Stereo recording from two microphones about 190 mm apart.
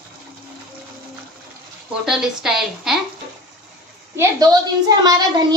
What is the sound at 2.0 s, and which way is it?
Speech, 5° right (ahead or behind).